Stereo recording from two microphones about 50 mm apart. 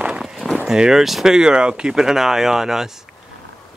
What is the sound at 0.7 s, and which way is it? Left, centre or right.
Speech, centre.